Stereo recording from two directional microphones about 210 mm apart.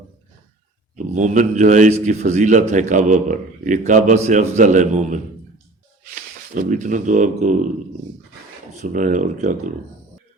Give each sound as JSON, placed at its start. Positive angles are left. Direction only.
{"t": 0.9, "sound": "a man's voice", "side_deg": -35}
{"t": 8.7, "sound": "a man's voice", "side_deg": -35}